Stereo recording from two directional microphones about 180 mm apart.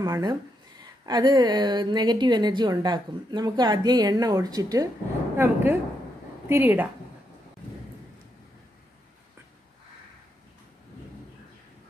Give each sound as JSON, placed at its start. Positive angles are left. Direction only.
{"t": 0.0, "sound": "a woman's voice", "side_deg": -20}